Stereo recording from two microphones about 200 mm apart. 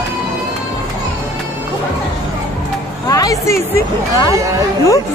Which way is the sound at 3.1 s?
15° left (ahead or behind).